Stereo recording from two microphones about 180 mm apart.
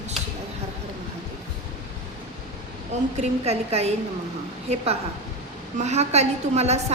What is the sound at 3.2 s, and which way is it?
A woman's voice, 35° right (ahead or behind).